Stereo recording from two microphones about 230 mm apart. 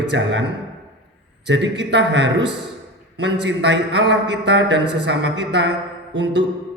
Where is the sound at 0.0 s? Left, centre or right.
Right.